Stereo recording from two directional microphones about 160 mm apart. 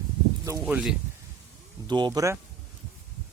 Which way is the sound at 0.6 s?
5° right (ahead or behind).